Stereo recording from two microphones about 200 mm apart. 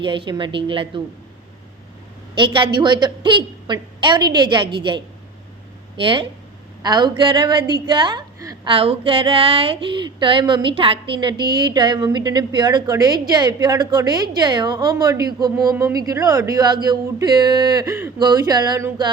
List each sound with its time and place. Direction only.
0.0 s a woman's voice: 25° right (ahead or behind)
2.4 s a woman's voice: 25° right (ahead or behind)